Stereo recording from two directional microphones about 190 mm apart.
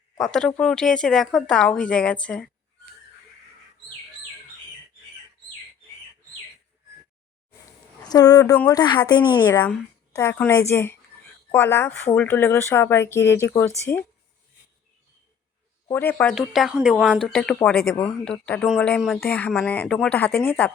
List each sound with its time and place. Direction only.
0.2 s speech: 5° left (ahead or behind)
8.0 s speech: 20° left (ahead or behind)
15.9 s speech: 10° left (ahead or behind)
16.3 s speech: centre (ahead or behind)